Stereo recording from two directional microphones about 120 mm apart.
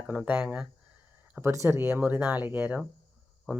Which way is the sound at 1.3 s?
25° right (ahead or behind).